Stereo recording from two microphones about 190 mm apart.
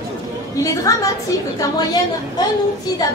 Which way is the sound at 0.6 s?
15° left (ahead or behind).